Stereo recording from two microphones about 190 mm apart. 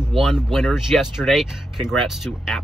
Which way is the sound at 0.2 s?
Centre (ahead or behind).